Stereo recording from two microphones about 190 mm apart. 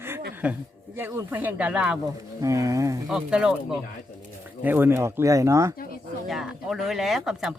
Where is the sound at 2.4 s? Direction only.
15° right (ahead or behind).